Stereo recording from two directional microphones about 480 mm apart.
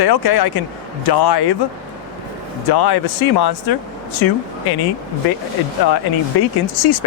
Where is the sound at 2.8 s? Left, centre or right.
Left.